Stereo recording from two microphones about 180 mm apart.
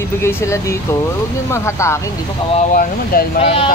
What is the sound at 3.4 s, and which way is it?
Speech, 35° left (ahead or behind).